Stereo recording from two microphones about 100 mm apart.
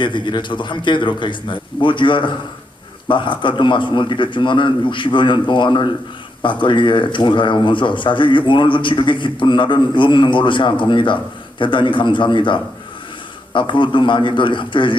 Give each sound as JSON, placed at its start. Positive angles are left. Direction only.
{"t": 0.0, "sound": "a man's voice", "side_deg": 50}